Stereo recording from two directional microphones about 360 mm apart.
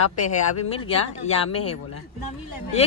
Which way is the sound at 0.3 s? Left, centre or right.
Centre.